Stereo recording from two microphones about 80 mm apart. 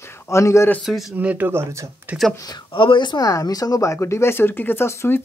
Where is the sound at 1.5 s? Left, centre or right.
Right.